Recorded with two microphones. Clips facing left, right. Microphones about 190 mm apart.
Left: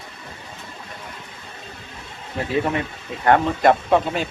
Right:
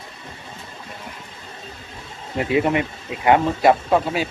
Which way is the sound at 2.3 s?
15° right (ahead or behind).